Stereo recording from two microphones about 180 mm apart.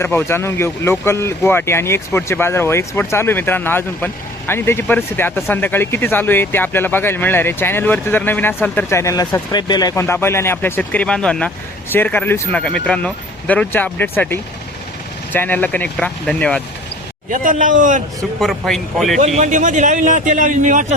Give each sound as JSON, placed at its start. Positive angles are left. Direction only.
{"t": 0.0, "sound": "speech", "side_deg": 10}
{"t": 17.2, "sound": "a man's voice", "side_deg": -50}
{"t": 18.3, "sound": "a man's voice", "side_deg": 0}
{"t": 19.4, "sound": "a man's voice", "side_deg": -45}